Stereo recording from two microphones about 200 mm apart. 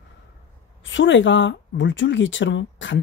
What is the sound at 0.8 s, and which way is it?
Speech, 70° left (ahead or behind).